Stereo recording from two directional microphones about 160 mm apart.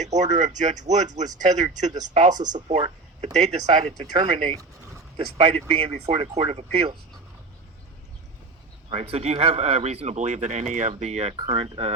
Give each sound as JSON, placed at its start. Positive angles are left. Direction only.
{"t": 0.0, "sound": "speech", "side_deg": -45}
{"t": 8.9, "sound": "speech", "side_deg": -40}
{"t": 11.4, "sound": "speech", "side_deg": -35}